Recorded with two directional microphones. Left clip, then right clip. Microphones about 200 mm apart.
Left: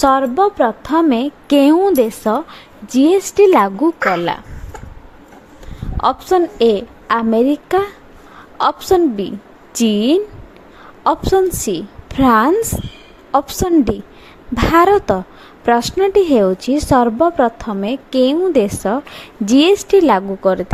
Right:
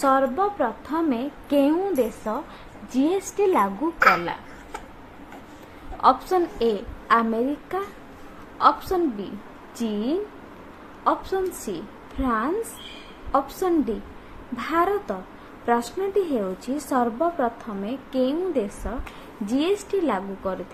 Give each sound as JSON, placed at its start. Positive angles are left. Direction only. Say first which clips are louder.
{"t": 0.0, "sound": "a woman's voice", "louder": "left 8 dB", "side_deg": 45}
{"t": 6.0, "sound": "a woman's voice", "louder": "left 5 dB", "side_deg": 35}